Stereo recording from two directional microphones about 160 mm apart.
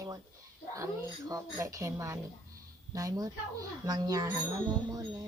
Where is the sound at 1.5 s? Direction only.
20° right (ahead or behind).